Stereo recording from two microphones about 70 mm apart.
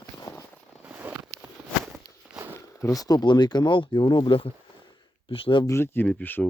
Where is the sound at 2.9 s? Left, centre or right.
Left.